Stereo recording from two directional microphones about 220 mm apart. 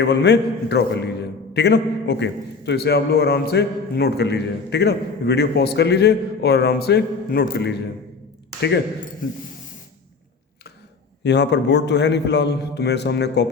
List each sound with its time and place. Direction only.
0.0 s a man's voice: 50° left (ahead or behind)
11.2 s a man's voice: 50° left (ahead or behind)